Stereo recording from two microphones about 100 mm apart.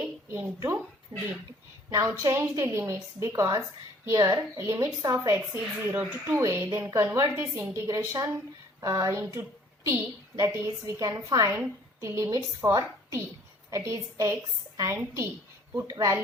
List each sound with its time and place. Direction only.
0.3 s a woman's voice: 20° right (ahead or behind)
5.5 s a woman's voice: centre (ahead or behind)
5.8 s a woman's voice: 20° right (ahead or behind)
6.3 s a woman's voice: 30° right (ahead or behind)
7.9 s a woman's voice: 35° right (ahead or behind)
15.7 s a woman's voice: 30° right (ahead or behind)